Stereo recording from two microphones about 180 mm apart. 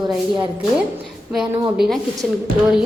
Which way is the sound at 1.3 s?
Centre (ahead or behind).